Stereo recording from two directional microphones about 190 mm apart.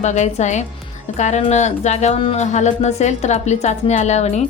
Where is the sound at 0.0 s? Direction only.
40° left (ahead or behind).